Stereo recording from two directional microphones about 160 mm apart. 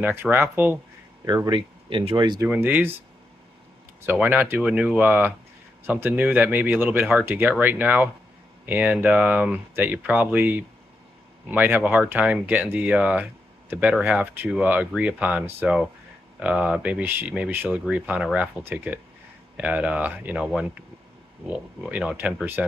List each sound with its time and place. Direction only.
0.0 s speech: 10° right (ahead or behind)
1.2 s speech: 25° right (ahead or behind)
2.4 s speech: 10° right (ahead or behind)
4.0 s speech: 10° right (ahead or behind)